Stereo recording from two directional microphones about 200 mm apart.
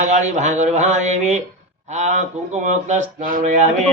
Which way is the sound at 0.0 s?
35° right (ahead or behind).